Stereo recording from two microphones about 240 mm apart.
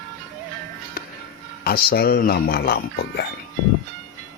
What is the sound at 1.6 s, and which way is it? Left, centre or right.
Speech, left.